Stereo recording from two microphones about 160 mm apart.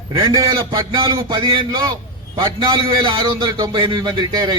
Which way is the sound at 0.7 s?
30° right (ahead or behind).